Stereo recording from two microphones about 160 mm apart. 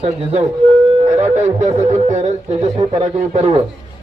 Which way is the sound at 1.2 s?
45° right (ahead or behind).